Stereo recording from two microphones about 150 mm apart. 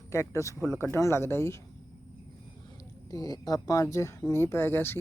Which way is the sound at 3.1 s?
25° left (ahead or behind).